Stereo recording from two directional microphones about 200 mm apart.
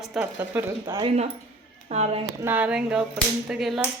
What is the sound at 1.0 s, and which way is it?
Speech, 30° right (ahead or behind).